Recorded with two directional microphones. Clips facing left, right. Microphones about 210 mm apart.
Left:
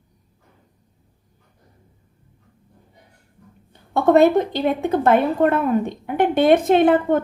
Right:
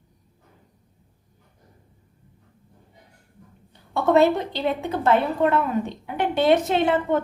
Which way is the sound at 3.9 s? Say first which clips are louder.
Left 4 dB; 50° left (ahead or behind).